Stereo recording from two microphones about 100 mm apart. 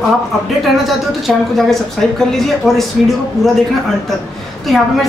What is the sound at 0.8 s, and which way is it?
A woman's voice, centre (ahead or behind).